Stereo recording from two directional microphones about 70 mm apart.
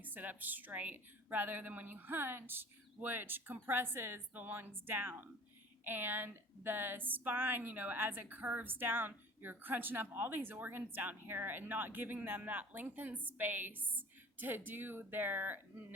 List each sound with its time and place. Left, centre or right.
0.0 s a woman's voice: right